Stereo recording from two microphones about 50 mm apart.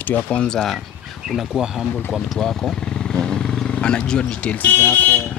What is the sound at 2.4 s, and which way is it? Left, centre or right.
Speech, centre.